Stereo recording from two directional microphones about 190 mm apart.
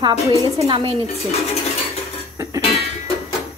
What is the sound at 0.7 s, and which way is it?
Speech, 30° right (ahead or behind).